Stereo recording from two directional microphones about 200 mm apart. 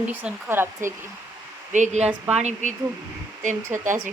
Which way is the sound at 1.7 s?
35° right (ahead or behind).